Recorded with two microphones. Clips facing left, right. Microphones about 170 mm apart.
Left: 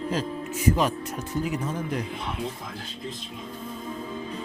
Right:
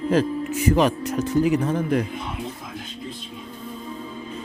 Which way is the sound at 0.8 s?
80° right.